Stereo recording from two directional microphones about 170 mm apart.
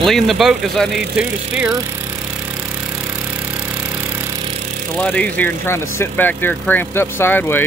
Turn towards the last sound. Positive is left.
turn(degrees=10)  # may be behind; listen again after turning